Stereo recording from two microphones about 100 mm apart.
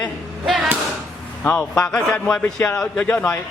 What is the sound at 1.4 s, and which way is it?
A man's voice, 15° left (ahead or behind).